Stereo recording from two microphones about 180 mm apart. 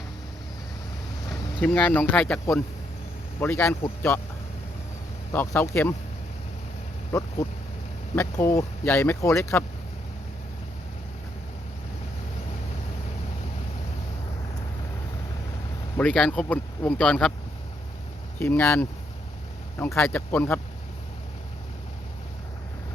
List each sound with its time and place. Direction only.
1.6 s speech: 10° left (ahead or behind)
5.3 s speech: 10° left (ahead or behind)
7.1 s speech: 15° left (ahead or behind)
16.0 s speech: 5° left (ahead or behind)
18.3 s speech: 10° left (ahead or behind)